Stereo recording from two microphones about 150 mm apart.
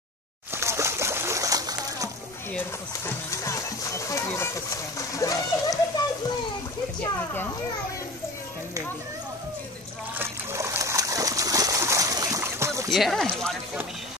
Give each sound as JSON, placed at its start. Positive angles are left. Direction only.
{"t": 0.6, "sound": "splash", "side_deg": -20}
{"t": 3.3, "sound": "speech", "side_deg": 20}
{"t": 10.1, "sound": "splash", "side_deg": -15}
{"t": 12.9, "sound": "speech", "side_deg": 0}